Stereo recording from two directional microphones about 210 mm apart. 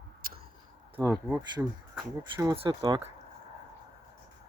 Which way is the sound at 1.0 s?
15° right (ahead or behind).